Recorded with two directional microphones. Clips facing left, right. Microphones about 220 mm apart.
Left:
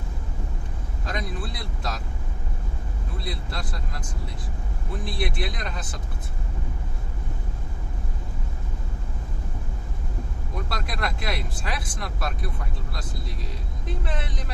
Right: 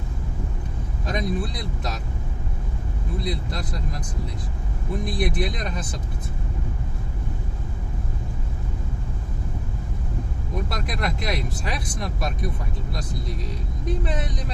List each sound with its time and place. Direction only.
1.0 s speech: 20° right (ahead or behind)
3.2 s speech: 20° right (ahead or behind)
5.0 s speech: 20° right (ahead or behind)
10.7 s speech: 20° right (ahead or behind)
13.8 s speech: 20° right (ahead or behind)